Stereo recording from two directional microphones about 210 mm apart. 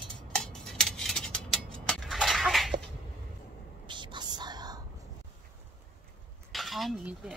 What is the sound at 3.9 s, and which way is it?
Whispering, 20° right (ahead or behind).